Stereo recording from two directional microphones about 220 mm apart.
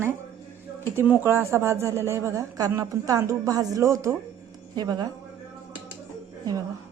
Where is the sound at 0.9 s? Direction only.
10° right (ahead or behind).